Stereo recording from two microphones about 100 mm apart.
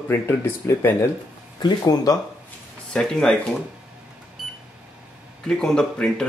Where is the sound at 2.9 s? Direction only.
5° left (ahead or behind).